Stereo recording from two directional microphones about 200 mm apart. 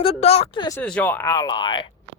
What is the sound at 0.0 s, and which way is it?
Speech, 30° left (ahead or behind).